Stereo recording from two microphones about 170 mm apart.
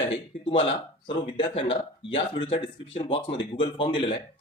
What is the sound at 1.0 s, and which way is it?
Speech, 30° left (ahead or behind).